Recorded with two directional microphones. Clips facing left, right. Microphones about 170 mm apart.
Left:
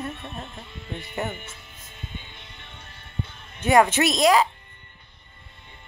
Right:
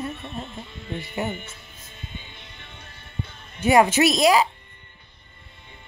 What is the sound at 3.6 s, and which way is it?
Speech, 10° right (ahead or behind).